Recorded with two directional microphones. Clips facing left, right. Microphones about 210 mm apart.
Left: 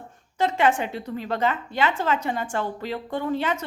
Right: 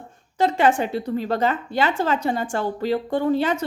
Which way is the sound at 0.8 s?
35° right (ahead or behind).